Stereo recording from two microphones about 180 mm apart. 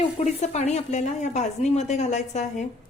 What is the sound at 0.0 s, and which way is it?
Speech, 40° left (ahead or behind).